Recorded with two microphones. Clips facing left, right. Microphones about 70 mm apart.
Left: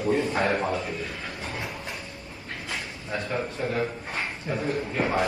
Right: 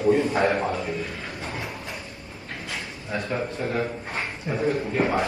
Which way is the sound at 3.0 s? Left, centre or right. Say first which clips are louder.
Right 2 dB; right.